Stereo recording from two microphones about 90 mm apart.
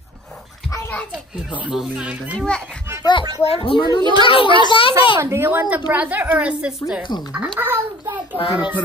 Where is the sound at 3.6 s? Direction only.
85° left.